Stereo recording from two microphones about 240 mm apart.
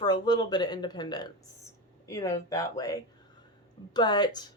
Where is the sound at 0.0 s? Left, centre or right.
Centre.